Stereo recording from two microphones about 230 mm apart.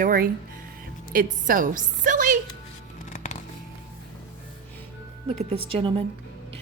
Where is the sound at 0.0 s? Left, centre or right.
Right.